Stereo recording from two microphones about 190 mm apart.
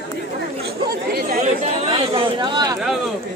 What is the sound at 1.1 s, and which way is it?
Chatter, 50° right (ahead or behind).